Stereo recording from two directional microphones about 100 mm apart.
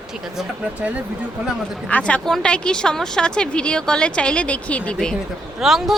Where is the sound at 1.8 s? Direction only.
15° left (ahead or behind).